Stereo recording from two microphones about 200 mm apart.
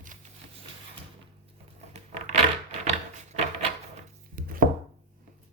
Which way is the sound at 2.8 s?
35° right (ahead or behind).